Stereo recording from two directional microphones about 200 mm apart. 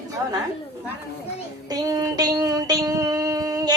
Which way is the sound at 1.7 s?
20° right (ahead or behind).